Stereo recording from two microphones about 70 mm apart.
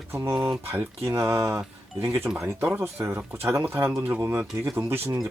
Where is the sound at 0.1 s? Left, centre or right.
Right.